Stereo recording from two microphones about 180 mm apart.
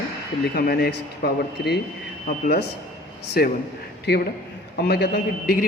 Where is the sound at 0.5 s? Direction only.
60° left (ahead or behind).